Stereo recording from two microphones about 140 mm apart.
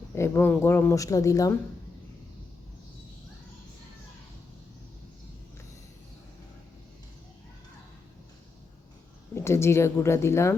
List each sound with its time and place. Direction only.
0.1 s speech: 20° left (ahead or behind)
9.3 s speech: 20° left (ahead or behind)